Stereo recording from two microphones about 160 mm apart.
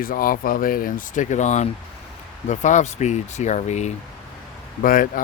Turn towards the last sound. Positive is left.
turn(degrees=60)  # may be behind; listen again after turning